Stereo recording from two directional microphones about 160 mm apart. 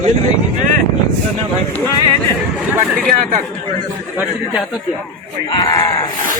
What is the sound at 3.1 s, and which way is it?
Speech, 60° right (ahead or behind).